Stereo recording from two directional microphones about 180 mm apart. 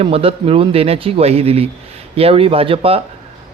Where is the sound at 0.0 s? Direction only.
30° right (ahead or behind).